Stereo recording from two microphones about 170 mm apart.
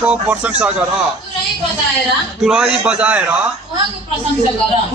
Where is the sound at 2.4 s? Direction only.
5° right (ahead or behind).